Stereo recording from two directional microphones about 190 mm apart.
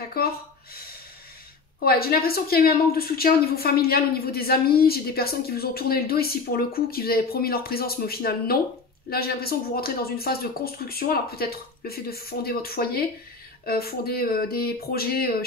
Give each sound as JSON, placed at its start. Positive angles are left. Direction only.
{"t": 0.2, "sound": "a woman's voice", "side_deg": 55}
{"t": 1.9, "sound": "a woman's voice", "side_deg": 55}